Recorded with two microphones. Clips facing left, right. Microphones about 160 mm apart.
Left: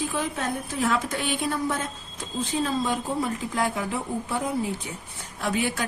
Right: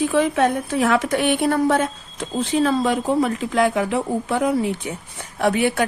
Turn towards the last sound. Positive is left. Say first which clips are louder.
# right 8 dB
turn(degrees=-65)  # may be behind; listen again after turning